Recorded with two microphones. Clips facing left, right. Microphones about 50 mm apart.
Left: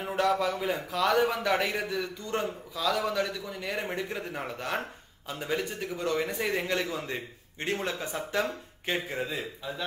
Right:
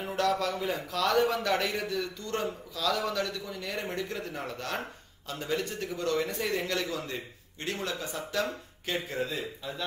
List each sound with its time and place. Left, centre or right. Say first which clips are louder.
0.0 s a man's voice: left 2 dB; centre